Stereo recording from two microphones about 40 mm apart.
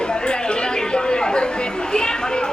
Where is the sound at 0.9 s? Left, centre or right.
Left.